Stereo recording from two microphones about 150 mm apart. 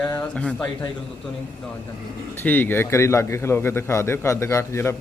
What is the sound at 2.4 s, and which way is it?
A man's voice, 15° left (ahead or behind).